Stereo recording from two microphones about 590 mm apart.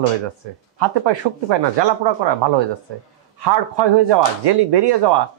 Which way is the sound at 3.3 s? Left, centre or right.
Right.